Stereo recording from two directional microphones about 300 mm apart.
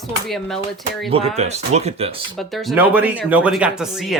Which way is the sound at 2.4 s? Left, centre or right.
Centre.